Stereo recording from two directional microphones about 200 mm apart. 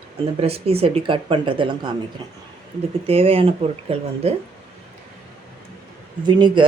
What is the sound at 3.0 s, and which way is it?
Speech, 30° right (ahead or behind).